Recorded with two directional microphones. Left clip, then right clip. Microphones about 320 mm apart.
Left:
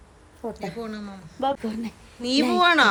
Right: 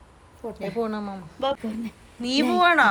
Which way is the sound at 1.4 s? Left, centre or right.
Centre.